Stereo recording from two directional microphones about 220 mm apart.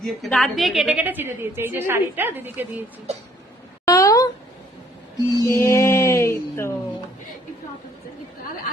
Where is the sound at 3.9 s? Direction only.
15° left (ahead or behind).